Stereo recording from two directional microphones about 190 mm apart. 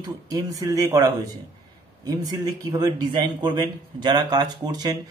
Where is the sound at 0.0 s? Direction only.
15° right (ahead or behind).